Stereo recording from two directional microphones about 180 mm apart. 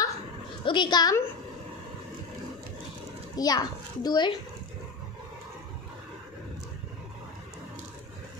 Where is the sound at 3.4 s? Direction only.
20° left (ahead or behind).